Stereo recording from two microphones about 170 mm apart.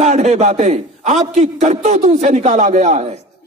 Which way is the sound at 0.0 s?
45° right (ahead or behind).